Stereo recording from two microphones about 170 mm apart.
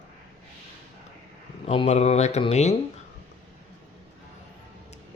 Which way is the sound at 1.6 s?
35° left (ahead or behind).